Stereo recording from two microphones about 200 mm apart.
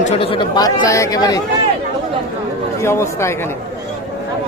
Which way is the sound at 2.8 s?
15° left (ahead or behind).